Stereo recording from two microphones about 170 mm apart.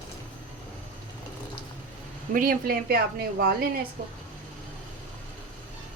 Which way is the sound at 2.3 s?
55° right (ahead or behind).